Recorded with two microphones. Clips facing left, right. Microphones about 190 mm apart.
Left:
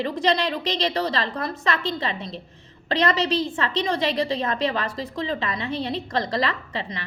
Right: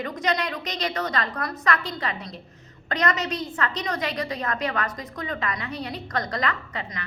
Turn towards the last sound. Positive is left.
turn(degrees=30)  # may be behind; listen again after turning